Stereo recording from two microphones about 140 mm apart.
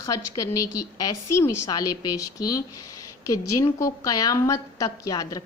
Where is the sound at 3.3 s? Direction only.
25° left (ahead or behind).